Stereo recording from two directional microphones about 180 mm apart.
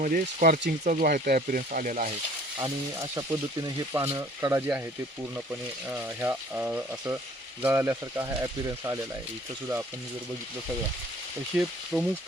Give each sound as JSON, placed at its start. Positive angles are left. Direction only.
{"t": 0.0, "sound": "speech", "side_deg": -50}
{"t": 3.2, "sound": "speech", "side_deg": -15}
{"t": 11.5, "sound": "speech", "side_deg": -5}